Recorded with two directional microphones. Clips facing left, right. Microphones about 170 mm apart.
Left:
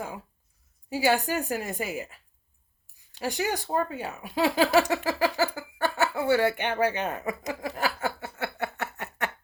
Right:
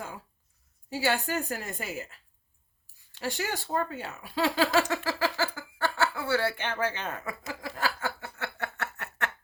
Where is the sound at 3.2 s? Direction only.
15° left (ahead or behind).